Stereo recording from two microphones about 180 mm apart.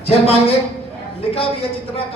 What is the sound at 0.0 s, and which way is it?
Speech, 35° left (ahead or behind).